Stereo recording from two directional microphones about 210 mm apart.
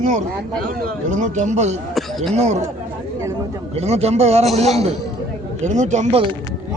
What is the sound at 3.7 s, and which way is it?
Speech, 30° right (ahead or behind).